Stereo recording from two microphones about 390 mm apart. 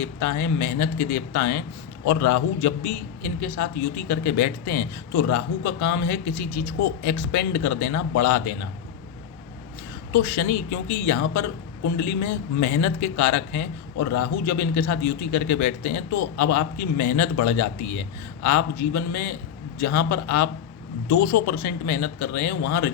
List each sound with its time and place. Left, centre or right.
0.0 s speech: left
7.3 s speech: left
10.1 s a woman's voice: left